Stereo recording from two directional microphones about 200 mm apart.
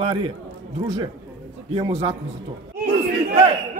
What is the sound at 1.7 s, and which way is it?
Speech, 30° right (ahead or behind).